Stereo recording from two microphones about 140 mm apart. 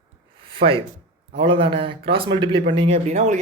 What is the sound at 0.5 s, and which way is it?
Speech, 40° right (ahead or behind).